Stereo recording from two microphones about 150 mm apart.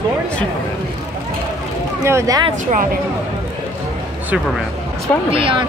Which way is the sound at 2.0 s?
20° right (ahead or behind).